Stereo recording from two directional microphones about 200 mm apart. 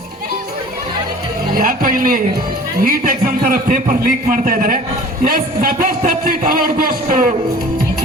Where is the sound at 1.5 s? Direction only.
45° right (ahead or behind).